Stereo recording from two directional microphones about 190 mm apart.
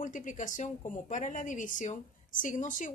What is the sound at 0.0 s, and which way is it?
Speech, 45° left (ahead or behind).